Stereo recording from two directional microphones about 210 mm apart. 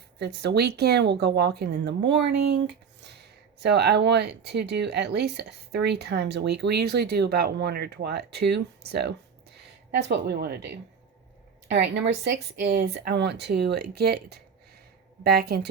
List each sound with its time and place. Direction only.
0.2 s speech: 50° right (ahead or behind)
11.7 s speech: 55° right (ahead or behind)